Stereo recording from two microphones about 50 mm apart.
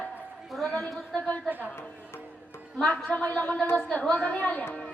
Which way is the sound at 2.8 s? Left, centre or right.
Left.